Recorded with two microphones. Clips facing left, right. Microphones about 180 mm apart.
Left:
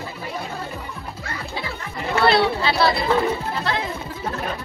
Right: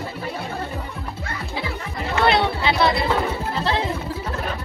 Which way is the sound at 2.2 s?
20° right (ahead or behind).